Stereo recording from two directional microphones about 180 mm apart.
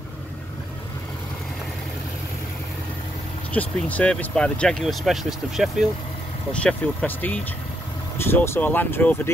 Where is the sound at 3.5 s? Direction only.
10° left (ahead or behind).